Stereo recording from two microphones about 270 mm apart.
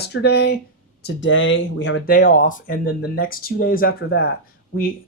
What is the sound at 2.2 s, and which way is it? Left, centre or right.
Speech, left.